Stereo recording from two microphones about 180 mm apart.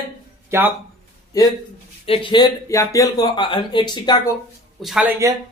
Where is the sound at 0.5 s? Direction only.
15° right (ahead or behind).